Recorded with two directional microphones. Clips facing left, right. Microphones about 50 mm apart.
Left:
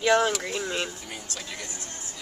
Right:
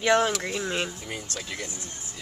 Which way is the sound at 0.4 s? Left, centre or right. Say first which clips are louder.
Right 1 dB; centre.